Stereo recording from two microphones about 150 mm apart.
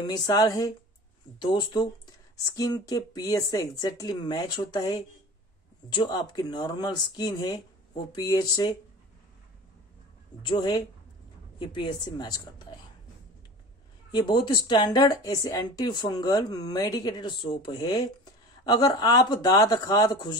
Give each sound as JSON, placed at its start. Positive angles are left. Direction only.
{"t": 0.0, "sound": "speech", "side_deg": 25}
{"t": 10.4, "sound": "speech", "side_deg": 30}
{"t": 14.1, "sound": "speech", "side_deg": 30}